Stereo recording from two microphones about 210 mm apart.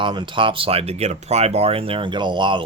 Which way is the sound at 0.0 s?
20° right (ahead or behind).